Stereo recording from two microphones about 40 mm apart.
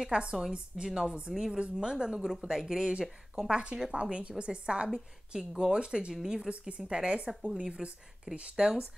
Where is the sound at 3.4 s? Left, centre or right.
Right.